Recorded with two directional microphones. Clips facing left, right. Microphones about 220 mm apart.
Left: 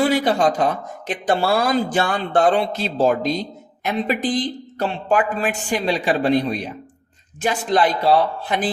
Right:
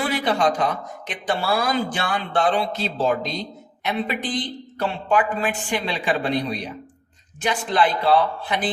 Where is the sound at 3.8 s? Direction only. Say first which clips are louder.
Left 3 dB; 40° left (ahead or behind).